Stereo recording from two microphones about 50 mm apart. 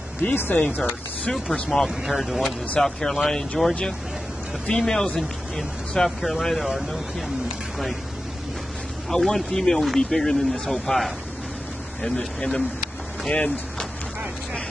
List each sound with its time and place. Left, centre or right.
0.2 s speech: left
1.3 s speech: centre
1.9 s speech: centre
2.8 s speech: centre
5.6 s speech: centre
9.1 s speech: centre